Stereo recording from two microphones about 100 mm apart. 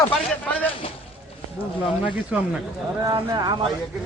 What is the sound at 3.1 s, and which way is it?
Speech, 45° right (ahead or behind).